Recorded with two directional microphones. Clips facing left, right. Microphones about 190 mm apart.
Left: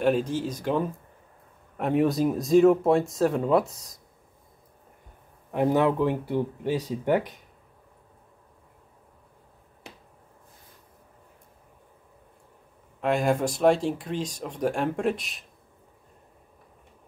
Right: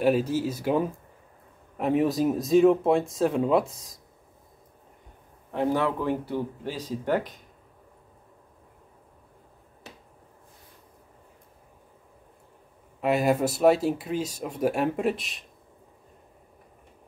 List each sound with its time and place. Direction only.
0.0 s speech: 5° right (ahead or behind)
5.5 s speech: 15° left (ahead or behind)
13.0 s speech: 5° right (ahead or behind)